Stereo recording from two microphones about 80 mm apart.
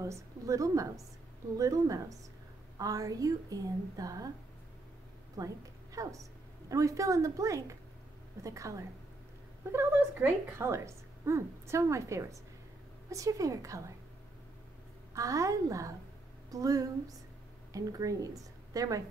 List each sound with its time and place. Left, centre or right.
0.0 s a woman's voice: right
5.4 s a woman's voice: right
15.1 s a woman's voice: right